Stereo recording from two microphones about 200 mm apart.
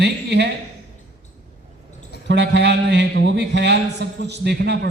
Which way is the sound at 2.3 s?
60° right (ahead or behind).